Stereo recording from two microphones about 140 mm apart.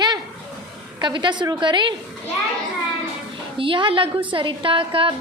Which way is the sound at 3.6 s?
35° right (ahead or behind).